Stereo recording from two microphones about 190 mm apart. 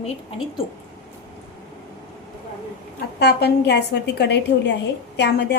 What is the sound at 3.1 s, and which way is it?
A woman's voice, 60° left (ahead or behind).